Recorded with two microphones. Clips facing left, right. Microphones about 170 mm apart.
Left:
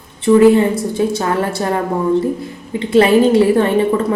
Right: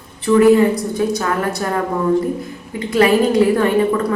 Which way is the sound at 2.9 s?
30° left (ahead or behind).